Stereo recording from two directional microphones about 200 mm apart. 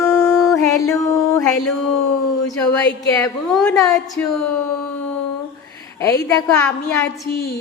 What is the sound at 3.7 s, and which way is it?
Speech, 15° left (ahead or behind).